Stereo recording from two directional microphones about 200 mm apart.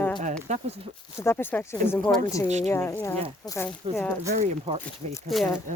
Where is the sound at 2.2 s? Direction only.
15° left (ahead or behind).